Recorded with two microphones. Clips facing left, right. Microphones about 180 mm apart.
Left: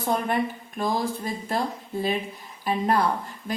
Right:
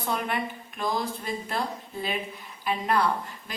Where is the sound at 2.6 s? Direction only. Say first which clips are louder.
Left 3 dB; 40° left (ahead or behind).